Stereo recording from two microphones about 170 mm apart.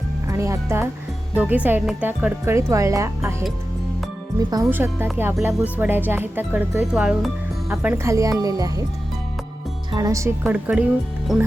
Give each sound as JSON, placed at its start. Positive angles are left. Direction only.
{"t": 0.3, "sound": "speech", "side_deg": -15}
{"t": 4.4, "sound": "speech", "side_deg": -20}
{"t": 9.9, "sound": "speech", "side_deg": -20}